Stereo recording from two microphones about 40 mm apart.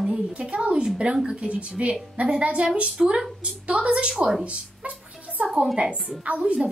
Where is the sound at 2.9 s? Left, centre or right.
Centre.